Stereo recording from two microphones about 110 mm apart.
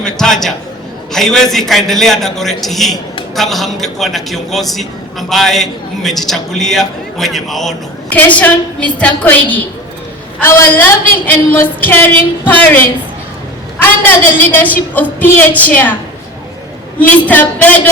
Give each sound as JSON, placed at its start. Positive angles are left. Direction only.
{"t": 0.0, "sound": "a man's voice", "side_deg": 5}
{"t": 8.1, "sound": "a woman's voice", "side_deg": 15}
{"t": 17.0, "sound": "a woman's voice", "side_deg": 15}